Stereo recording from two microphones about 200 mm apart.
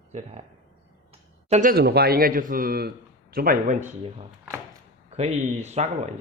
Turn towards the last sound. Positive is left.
turn(degrees=-35)  # may be behind; listen again after turning